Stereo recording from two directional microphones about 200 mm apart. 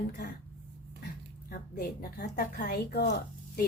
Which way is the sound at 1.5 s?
45° left (ahead or behind).